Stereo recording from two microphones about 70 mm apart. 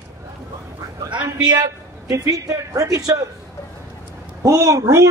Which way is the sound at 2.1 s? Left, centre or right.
Right.